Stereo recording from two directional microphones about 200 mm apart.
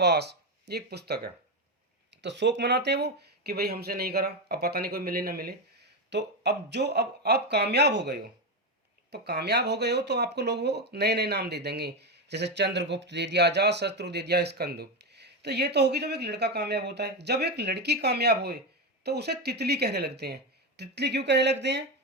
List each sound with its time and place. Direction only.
0.0 s speech: 55° right (ahead or behind)